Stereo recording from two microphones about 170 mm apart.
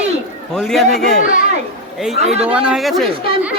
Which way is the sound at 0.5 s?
Centre (ahead or behind).